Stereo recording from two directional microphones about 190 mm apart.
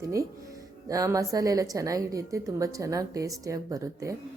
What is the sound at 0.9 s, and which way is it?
A woman's voice, 20° right (ahead or behind).